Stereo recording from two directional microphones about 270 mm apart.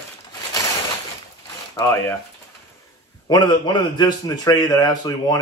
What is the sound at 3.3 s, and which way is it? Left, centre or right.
A man's voice, centre.